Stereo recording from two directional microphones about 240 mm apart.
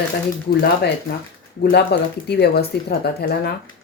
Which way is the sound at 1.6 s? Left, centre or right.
Left.